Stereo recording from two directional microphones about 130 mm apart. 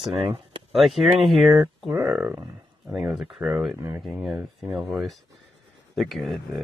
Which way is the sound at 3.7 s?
20° right (ahead or behind).